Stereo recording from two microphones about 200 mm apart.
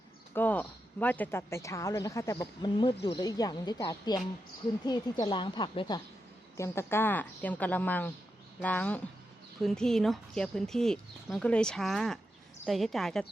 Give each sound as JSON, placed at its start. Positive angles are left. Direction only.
{"t": 0.3, "sound": "a woman's voice", "side_deg": 10}
{"t": 6.6, "sound": "a woman's voice", "side_deg": 10}